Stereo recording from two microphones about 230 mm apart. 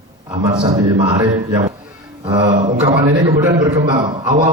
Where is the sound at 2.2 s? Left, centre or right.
Centre.